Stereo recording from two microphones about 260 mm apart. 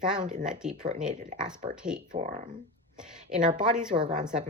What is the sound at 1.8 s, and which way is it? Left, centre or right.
Speech, centre.